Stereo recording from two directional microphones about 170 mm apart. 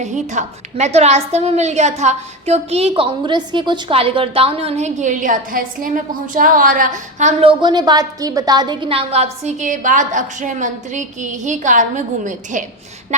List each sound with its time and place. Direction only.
0.0 s a woman's voice: 45° right (ahead or behind)
7.6 s a woman's voice: 25° right (ahead or behind); by 12.6 s 50° right (ahead or behind)